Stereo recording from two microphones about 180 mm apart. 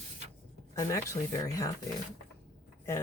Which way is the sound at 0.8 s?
20° left (ahead or behind).